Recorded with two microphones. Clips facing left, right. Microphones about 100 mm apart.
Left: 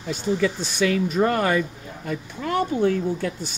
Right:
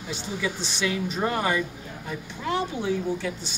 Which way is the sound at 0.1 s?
45° left (ahead or behind).